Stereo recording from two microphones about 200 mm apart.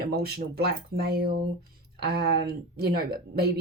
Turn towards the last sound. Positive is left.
turn(degrees=-50)  # may be behind; listen again after turning